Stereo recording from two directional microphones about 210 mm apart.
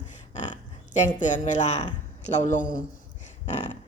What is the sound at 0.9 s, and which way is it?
A woman's voice, 35° left (ahead or behind).